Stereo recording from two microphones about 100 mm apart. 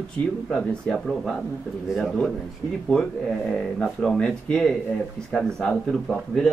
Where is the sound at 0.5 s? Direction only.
5° left (ahead or behind).